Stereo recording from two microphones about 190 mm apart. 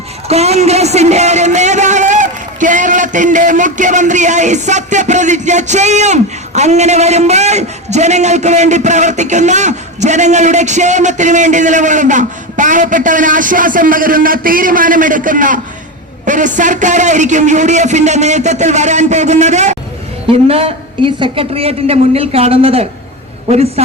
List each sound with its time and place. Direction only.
0.3 s a man's voice: 35° right (ahead or behind)